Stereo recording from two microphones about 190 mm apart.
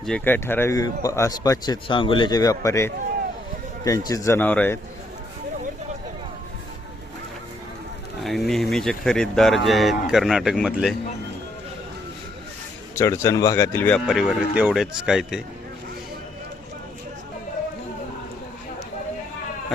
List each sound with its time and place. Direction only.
0.0 s speech: 5° left (ahead or behind)
8.2 s speech: centre (ahead or behind)
13.0 s speech: 15° left (ahead or behind)
14.1 s speech: centre (ahead or behind)